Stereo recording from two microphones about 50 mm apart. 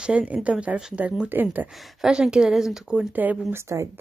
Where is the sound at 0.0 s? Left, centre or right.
Right.